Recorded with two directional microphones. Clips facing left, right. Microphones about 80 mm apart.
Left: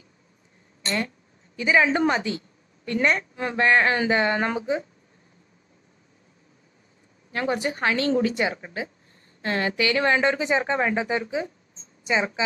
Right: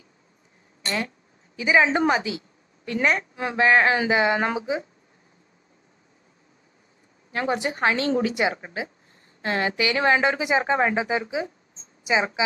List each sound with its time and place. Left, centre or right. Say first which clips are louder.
1.6 s a woman's voice: right 1 dB; centre
7.3 s a woman's voice: even; right